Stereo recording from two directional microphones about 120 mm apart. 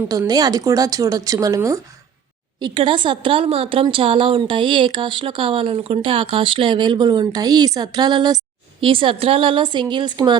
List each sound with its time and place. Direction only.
0.1 s speech: 30° right (ahead or behind)
2.6 s speech: 40° right (ahead or behind)
8.8 s a woman's voice: 45° right (ahead or behind)